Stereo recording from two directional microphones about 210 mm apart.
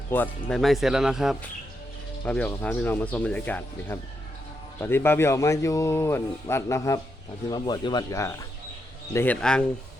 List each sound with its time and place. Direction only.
0.1 s speech: 10° left (ahead or behind)